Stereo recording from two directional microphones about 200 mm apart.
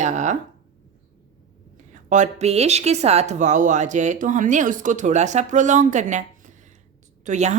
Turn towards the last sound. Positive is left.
turn(degrees=-35)  # may be behind; listen again after turning